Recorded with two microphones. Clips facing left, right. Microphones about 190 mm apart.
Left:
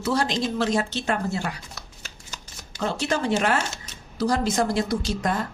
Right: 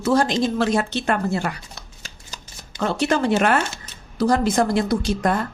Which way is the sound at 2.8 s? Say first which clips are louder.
Right 5 dB; 60° right (ahead or behind).